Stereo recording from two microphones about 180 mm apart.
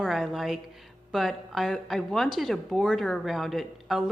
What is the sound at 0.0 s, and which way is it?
A woman's voice, centre (ahead or behind).